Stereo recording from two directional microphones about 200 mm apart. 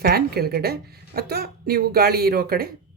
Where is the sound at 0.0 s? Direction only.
50° right (ahead or behind).